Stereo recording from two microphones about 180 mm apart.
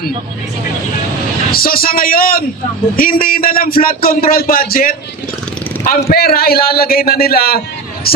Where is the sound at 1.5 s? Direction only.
55° left (ahead or behind).